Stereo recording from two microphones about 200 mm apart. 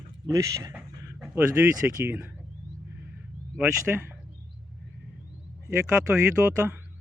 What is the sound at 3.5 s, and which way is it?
Speech, 10° right (ahead or behind).